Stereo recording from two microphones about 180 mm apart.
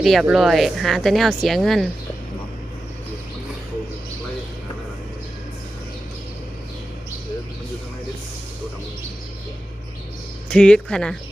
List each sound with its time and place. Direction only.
0.0 s speech: centre (ahead or behind)
10.5 s speech: 5° left (ahead or behind)